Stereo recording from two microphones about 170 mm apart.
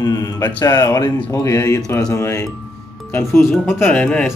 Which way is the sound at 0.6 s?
20° left (ahead or behind).